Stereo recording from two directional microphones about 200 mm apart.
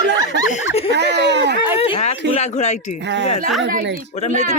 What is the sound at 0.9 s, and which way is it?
Speech, 60° right (ahead or behind).